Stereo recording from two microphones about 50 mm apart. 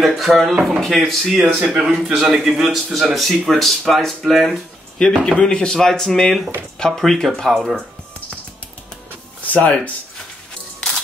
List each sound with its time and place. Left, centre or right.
0.0 s a man's voice: centre
1.4 s a man's voice: centre
4.5 s speech: centre
9.5 s speech: left